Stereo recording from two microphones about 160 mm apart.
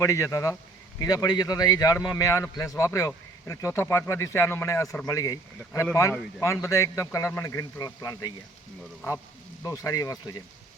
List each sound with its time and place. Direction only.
0.0 s speech: 20° left (ahead or behind)